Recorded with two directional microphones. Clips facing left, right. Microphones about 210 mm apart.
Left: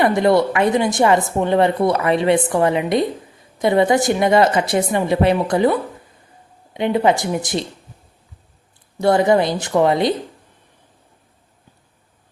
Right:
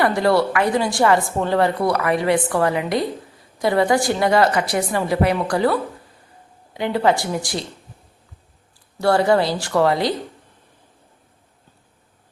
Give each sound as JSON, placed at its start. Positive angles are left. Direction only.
{"t": 0.0, "sound": "a woman's voice", "side_deg": 20}
{"t": 9.0, "sound": "a woman's voice", "side_deg": 20}